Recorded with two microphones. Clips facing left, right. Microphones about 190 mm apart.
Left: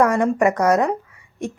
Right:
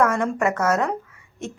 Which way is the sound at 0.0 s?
15° left (ahead or behind).